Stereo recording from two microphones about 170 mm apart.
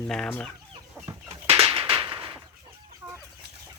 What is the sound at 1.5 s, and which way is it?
Whip, 35° right (ahead or behind).